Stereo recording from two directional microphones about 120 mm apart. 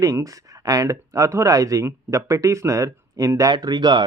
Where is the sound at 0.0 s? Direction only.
30° right (ahead or behind).